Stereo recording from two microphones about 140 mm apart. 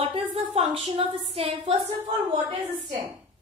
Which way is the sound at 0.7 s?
40° right (ahead or behind).